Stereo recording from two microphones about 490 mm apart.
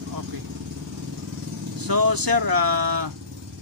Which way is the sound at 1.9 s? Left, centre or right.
Right.